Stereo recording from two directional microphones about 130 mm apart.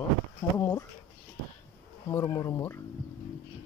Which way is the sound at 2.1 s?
25° left (ahead or behind).